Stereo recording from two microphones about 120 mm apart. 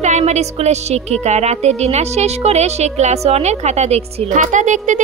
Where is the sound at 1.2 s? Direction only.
65° right (ahead or behind).